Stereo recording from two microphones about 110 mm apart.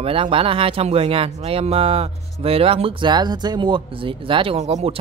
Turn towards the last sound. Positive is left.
turn(degrees=-65)  # may be behind; listen again after turning